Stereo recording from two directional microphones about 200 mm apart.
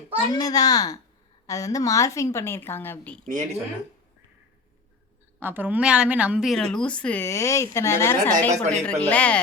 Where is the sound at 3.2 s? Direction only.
35° right (ahead or behind).